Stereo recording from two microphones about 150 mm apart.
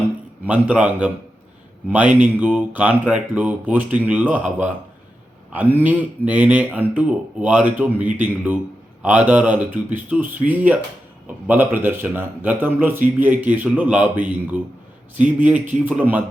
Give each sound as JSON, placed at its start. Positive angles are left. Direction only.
{"t": 0.4, "sound": "a man's voice", "side_deg": -10}